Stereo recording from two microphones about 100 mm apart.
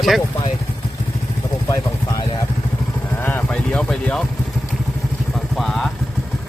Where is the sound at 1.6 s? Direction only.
35° left (ahead or behind).